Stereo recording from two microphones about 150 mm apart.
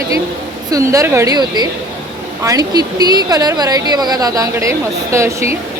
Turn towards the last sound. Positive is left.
turn(degrees=-20)  # may be behind; listen again after turning